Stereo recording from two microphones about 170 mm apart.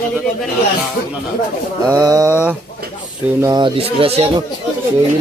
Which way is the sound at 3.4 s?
25° right (ahead or behind).